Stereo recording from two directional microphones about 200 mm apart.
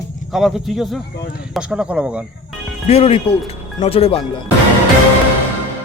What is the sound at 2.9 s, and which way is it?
Speech, 30° left (ahead or behind).